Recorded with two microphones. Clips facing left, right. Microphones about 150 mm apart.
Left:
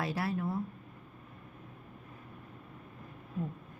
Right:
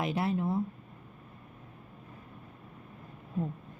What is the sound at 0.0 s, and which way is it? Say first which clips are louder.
Speech: right 3 dB; 20° right (ahead or behind).